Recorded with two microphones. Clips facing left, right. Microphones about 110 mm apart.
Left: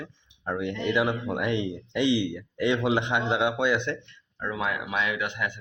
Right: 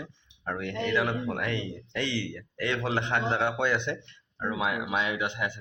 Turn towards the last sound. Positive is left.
turn(degrees=-25)  # may be behind; listen again after turning